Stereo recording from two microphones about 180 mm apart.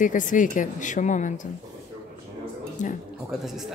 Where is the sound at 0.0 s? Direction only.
45° left (ahead or behind).